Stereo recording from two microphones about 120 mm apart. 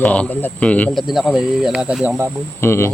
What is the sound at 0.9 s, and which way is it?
Speech, centre (ahead or behind).